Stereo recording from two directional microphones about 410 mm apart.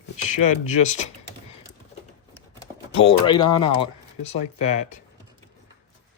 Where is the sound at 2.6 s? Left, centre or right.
Centre.